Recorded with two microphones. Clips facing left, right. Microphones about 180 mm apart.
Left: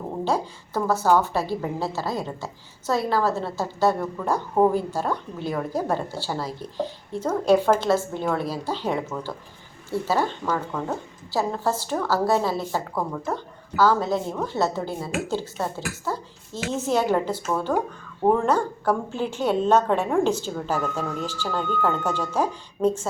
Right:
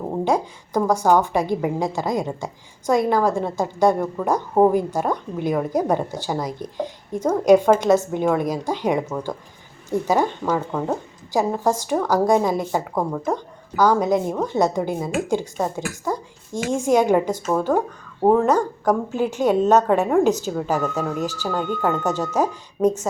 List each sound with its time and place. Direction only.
0.3 s a woman's voice: 15° right (ahead or behind)